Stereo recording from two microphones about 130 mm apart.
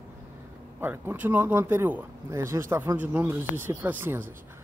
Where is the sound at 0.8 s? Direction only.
15° right (ahead or behind).